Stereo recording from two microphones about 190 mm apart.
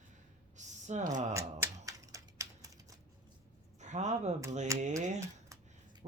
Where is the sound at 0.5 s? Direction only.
40° right (ahead or behind).